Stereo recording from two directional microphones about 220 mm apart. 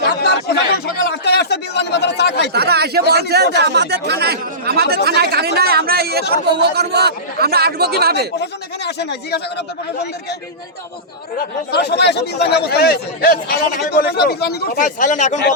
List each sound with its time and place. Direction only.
0.0 s a sound: 50° left (ahead or behind)
2.5 s speech: 45° right (ahead or behind)
8.4 s speech: 50° left (ahead or behind)
11.3 s speech: 50° left (ahead or behind)